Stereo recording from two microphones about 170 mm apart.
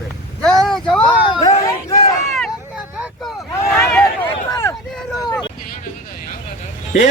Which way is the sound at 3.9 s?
15° left (ahead or behind).